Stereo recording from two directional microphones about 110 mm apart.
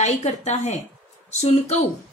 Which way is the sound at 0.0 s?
90° left.